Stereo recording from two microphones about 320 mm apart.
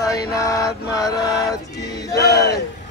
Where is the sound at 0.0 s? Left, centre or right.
Centre.